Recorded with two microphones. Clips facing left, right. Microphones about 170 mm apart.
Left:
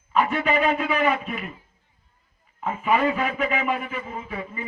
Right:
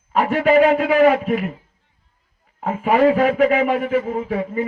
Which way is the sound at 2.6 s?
80° right.